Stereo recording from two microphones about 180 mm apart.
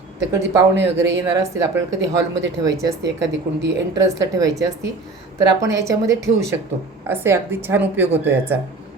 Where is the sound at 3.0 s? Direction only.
75° right (ahead or behind).